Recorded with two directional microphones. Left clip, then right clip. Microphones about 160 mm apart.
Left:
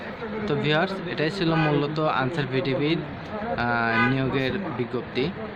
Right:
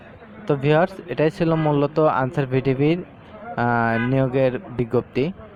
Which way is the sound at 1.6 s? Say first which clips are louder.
Right 1 dB; 45° right (ahead or behind).